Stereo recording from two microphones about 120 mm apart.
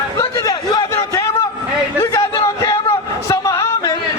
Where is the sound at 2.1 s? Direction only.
25° left (ahead or behind).